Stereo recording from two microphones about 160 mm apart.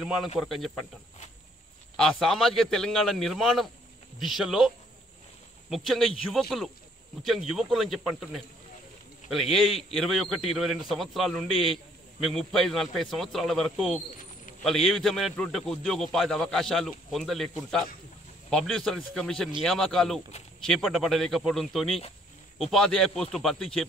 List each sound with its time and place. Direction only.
0.0 s a man's voice: centre (ahead or behind)
2.0 s a man's voice: centre (ahead or behind)